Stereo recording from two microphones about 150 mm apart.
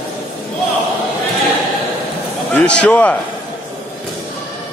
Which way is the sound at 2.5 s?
5° left (ahead or behind).